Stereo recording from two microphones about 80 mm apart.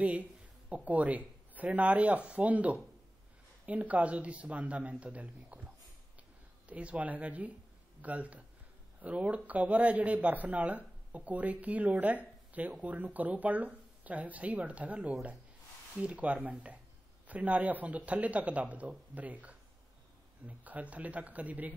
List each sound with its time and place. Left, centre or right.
0.0 s a man's voice: centre
6.7 s a man's voice: centre